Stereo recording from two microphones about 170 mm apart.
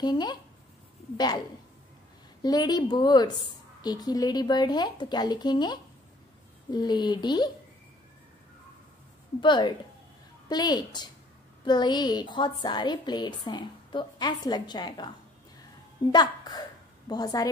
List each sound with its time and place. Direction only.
0.0 s a woman's voice: 25° left (ahead or behind)
2.4 s a woman's voice: 25° left (ahead or behind)
9.4 s a woman's voice: 25° left (ahead or behind)
16.1 s a woman's voice: 25° left (ahead or behind)